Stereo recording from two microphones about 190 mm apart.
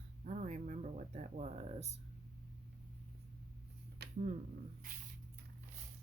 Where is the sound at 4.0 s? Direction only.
60° right (ahead or behind).